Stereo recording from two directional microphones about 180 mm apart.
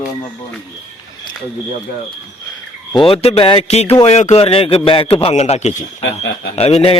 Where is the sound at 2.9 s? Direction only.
30° left (ahead or behind).